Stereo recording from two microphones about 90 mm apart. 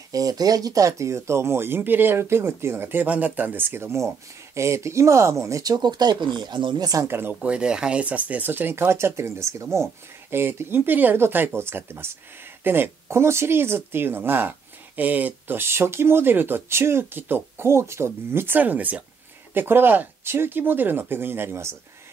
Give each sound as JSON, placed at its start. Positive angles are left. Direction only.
{"t": 0.1, "sound": "speech", "side_deg": -40}
{"t": 7.1, "sound": "speech", "side_deg": -25}
{"t": 7.4, "sound": "speech", "side_deg": -10}